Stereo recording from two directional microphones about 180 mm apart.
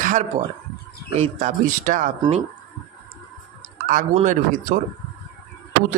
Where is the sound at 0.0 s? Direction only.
45° right (ahead or behind).